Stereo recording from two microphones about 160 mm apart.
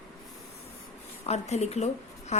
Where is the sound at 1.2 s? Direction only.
45° left (ahead or behind).